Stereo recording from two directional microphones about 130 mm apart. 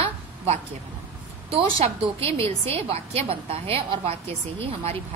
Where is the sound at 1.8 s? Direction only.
45° right (ahead or behind).